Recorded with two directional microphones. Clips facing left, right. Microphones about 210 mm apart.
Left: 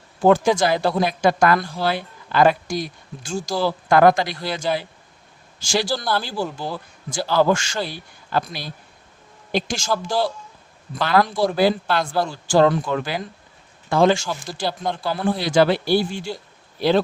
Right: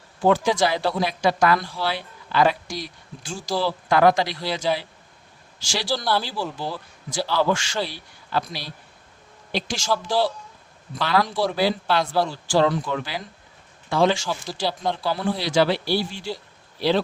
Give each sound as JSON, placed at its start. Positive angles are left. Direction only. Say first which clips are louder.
{"t": 0.2, "sound": "speech", "louder": "left 3 dB", "side_deg": 45}
{"t": 6.0, "sound": "speech", "louder": "even", "side_deg": 0}
{"t": 6.2, "sound": "speech", "louder": "left 2 dB", "side_deg": 45}